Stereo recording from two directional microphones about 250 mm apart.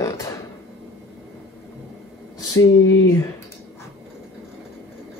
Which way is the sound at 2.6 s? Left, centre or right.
Left.